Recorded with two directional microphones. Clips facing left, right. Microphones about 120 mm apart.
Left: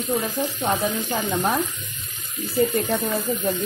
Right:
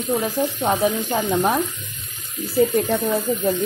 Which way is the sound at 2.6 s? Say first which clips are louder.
Right 3 dB; 10° right (ahead or behind).